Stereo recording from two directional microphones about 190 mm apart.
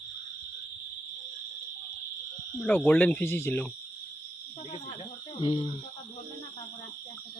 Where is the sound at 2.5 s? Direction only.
5° left (ahead or behind).